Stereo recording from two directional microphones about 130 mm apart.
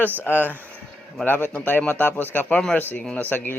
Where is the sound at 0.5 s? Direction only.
15° right (ahead or behind).